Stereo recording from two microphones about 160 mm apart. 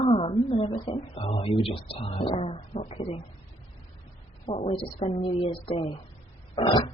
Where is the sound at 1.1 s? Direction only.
35° left (ahead or behind).